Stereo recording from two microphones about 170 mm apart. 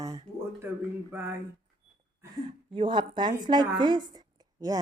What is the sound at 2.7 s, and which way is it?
A woman's voice, 30° right (ahead or behind).